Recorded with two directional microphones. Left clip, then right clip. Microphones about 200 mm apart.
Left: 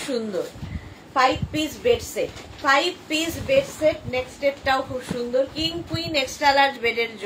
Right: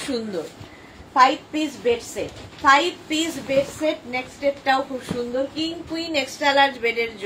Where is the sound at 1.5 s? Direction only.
20° left (ahead or behind).